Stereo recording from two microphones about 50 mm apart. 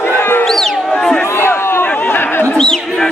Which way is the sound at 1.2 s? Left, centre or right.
Left.